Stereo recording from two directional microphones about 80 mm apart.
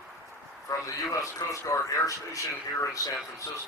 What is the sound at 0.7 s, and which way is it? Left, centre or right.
Speech, left.